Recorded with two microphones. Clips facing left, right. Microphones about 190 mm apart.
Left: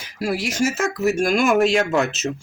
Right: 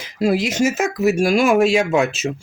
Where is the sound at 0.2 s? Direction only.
20° right (ahead or behind).